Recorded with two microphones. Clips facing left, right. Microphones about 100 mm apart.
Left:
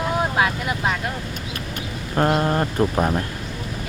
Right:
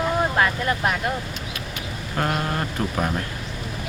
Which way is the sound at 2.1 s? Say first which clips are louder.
Left 6 dB; 30° left (ahead or behind).